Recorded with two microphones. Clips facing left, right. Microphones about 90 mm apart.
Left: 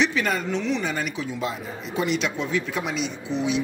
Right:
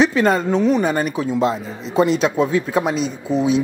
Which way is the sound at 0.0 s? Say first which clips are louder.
Right 8 dB; 35° right (ahead or behind).